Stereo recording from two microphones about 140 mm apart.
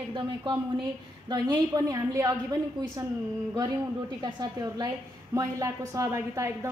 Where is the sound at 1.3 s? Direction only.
25° right (ahead or behind).